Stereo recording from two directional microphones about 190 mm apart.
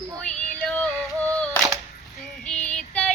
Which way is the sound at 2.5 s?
5° left (ahead or behind).